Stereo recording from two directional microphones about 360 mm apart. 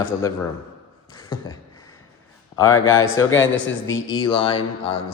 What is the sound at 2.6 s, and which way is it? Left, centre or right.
Speech, left.